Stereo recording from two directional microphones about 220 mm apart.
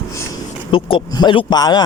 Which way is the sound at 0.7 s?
25° left (ahead or behind).